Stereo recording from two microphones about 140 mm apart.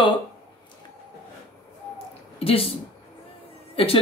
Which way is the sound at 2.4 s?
45° left (ahead or behind).